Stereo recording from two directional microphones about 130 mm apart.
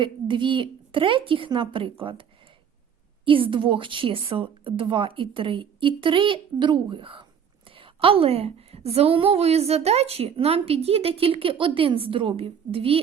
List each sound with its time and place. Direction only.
0.0 s a woman's voice: 40° right (ahead or behind)
3.2 s a woman's voice: 40° right (ahead or behind)